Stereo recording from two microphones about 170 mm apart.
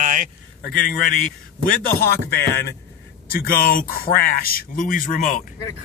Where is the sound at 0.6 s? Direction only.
60° left (ahead or behind).